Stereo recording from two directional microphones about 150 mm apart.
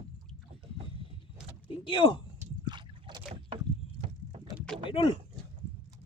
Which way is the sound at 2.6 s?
30° right (ahead or behind).